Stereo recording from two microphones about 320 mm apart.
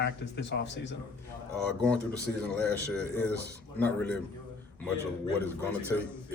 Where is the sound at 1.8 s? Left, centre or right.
Centre.